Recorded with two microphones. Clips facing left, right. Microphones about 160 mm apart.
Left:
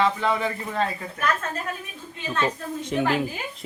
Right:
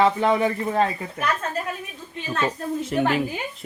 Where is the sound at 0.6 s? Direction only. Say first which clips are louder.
Right 5 dB; 35° right (ahead or behind).